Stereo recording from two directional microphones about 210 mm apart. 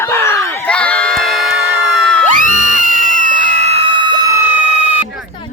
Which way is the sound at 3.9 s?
20° left (ahead or behind).